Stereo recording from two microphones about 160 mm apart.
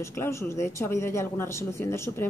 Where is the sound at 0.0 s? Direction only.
15° left (ahead or behind).